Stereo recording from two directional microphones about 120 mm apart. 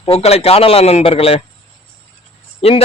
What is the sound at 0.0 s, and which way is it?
A man's voice, 50° left (ahead or behind).